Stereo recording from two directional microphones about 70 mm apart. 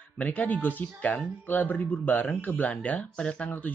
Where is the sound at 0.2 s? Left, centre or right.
Left.